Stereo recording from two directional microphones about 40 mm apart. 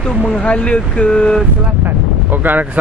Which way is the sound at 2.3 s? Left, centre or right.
Right.